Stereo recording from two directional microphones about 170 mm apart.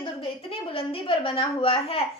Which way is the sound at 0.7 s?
30° left (ahead or behind).